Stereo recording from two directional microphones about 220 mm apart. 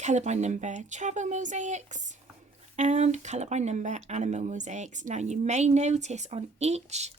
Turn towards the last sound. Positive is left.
turn(degrees=-30)  # may be behind; listen again after turning